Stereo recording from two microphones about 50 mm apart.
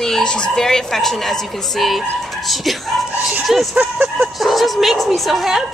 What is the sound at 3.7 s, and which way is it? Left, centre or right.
Speech, right.